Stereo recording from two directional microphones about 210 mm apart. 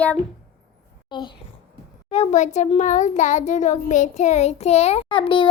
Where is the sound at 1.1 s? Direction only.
20° left (ahead or behind).